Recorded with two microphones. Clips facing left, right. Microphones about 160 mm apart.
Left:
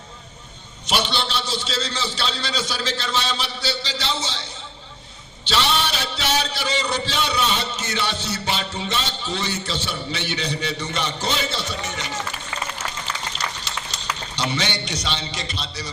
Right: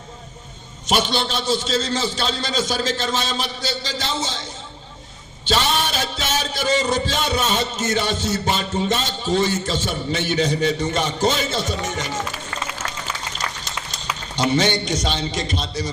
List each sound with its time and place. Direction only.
0.9 s a man's voice: 45° right (ahead or behind)
5.5 s a man's voice: 45° right (ahead or behind)
12.8 s applause: 5° left (ahead or behind)
13.4 s a sound: 45° right (ahead or behind)
14.3 s a man's voice: 45° right (ahead or behind)